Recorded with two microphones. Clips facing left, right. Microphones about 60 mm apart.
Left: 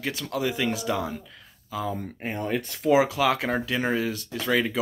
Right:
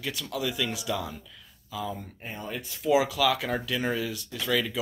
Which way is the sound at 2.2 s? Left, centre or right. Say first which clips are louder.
Left 8 dB; left.